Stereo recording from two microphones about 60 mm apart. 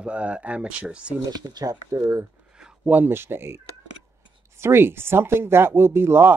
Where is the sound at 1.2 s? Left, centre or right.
Right.